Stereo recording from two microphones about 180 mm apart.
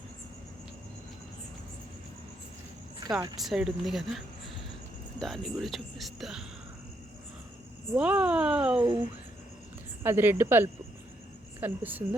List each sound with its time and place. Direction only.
3.4 s speech: centre (ahead or behind)
5.2 s speech: centre (ahead or behind)
7.9 s speech: 5° right (ahead or behind)
8.8 s speech: 25° right (ahead or behind)
10.0 s a woman's voice: 10° right (ahead or behind)